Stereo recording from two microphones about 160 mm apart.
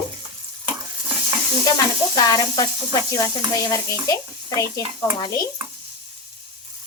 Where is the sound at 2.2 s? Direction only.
25° left (ahead or behind).